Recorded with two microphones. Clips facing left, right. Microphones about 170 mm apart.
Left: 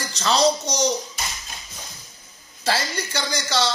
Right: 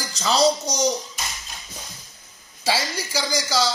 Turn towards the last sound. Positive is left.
turn(degrees=0)  # may be behind; listen again after turning